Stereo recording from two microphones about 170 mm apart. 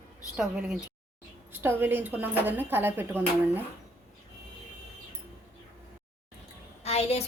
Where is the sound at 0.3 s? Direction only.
5° right (ahead or behind).